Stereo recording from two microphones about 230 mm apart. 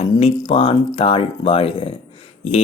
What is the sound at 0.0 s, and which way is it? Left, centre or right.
Speech, left.